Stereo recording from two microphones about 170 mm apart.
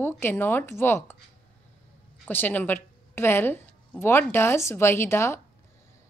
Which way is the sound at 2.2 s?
10° left (ahead or behind).